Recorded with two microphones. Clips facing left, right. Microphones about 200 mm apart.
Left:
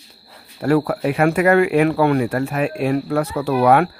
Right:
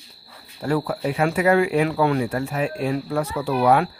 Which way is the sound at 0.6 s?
65° left (ahead or behind).